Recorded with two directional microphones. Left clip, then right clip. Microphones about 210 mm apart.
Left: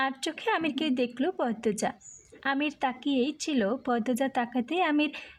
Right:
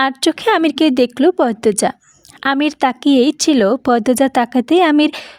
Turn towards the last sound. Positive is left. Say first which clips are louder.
# right 14 dB
turn(degrees=-45)  # may be behind; listen again after turning